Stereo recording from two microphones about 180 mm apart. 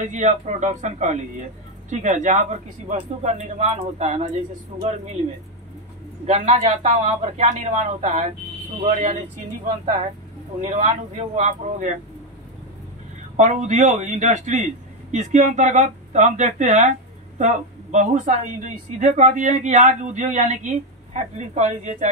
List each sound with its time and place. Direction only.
0.1 s speech: 40° right (ahead or behind)
6.2 s speech: 40° right (ahead or behind)
10.6 s speech: 40° right (ahead or behind)
13.4 s speech: 40° right (ahead or behind)